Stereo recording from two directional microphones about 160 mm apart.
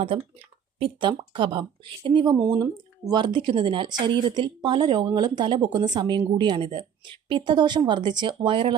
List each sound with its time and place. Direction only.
0.8 s speech: 35° right (ahead or behind)